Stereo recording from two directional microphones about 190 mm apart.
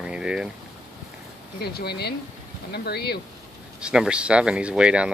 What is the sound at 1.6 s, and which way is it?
Speech, 55° left (ahead or behind).